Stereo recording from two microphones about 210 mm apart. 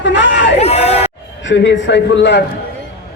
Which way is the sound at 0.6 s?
30° left (ahead or behind).